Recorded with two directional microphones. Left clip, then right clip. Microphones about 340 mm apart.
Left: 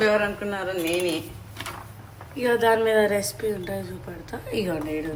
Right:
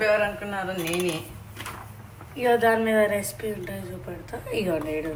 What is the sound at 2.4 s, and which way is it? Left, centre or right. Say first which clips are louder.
Speech: even; centre.